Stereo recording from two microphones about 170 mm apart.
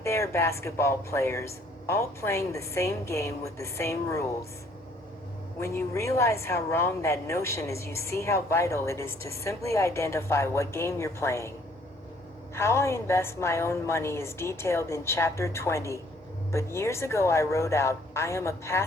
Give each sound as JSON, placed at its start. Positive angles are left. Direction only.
{"t": 0.0, "sound": "a woman's voice", "side_deg": 15}
{"t": 5.5, "sound": "a woman's voice", "side_deg": 15}
{"t": 12.5, "sound": "a woman's voice", "side_deg": 15}